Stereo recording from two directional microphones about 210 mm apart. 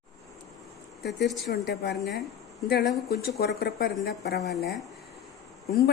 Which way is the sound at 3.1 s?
50° left (ahead or behind).